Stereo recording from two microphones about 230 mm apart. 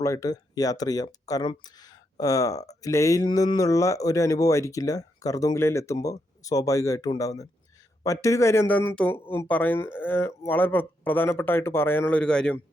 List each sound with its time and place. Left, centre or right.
0.0 s speech: centre